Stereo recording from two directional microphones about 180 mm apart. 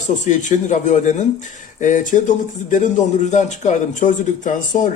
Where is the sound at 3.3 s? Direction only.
40° left (ahead or behind).